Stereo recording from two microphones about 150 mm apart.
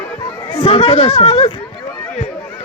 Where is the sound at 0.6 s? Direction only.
40° left (ahead or behind).